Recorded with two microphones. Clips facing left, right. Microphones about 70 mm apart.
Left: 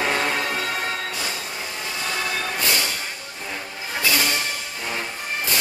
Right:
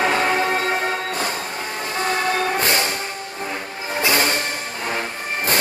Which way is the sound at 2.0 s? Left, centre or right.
Right.